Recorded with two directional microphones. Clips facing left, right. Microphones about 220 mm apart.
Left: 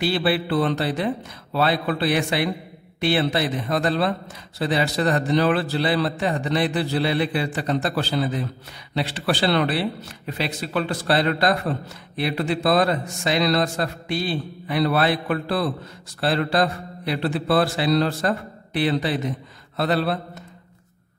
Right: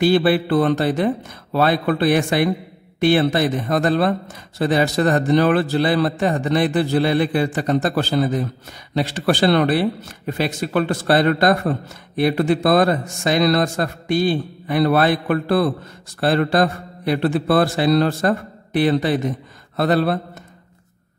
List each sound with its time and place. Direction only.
0.0 s speech: 45° right (ahead or behind)